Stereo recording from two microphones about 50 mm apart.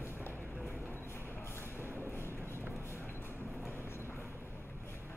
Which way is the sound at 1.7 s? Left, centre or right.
Left.